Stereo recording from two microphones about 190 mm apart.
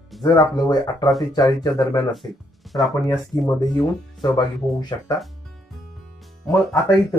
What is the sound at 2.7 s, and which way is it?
Speech, centre (ahead or behind).